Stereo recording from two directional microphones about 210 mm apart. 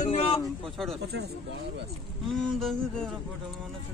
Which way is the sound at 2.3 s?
Centre (ahead or behind).